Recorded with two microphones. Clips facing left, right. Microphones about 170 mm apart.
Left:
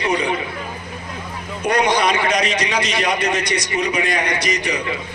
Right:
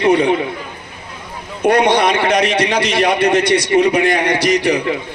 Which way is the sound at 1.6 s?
55° right (ahead or behind).